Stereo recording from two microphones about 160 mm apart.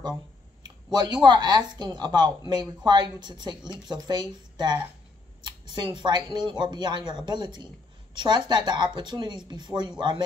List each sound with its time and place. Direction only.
0.9 s speech: 25° right (ahead or behind)